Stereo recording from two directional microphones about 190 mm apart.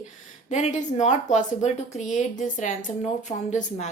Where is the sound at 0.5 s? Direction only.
40° left (ahead or behind).